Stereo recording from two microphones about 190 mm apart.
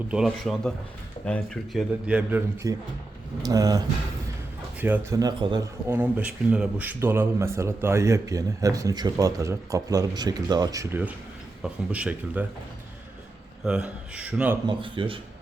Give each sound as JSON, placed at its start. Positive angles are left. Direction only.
{"t": 0.1, "sound": "a man's voice", "side_deg": 0}
{"t": 5.9, "sound": "a man's voice", "side_deg": -10}
{"t": 13.7, "sound": "a man's voice", "side_deg": -5}
{"t": 14.7, "sound": "speech", "side_deg": -25}